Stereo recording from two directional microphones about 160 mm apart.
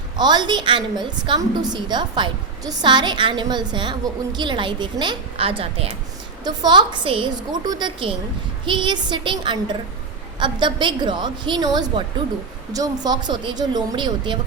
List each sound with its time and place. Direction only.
0.2 s a woman's voice: 25° right (ahead or behind)